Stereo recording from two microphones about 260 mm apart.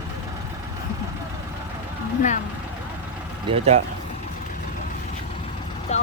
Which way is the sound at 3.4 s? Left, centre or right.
Right.